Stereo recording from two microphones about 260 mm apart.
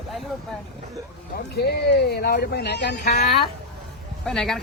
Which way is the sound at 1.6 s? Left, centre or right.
Left.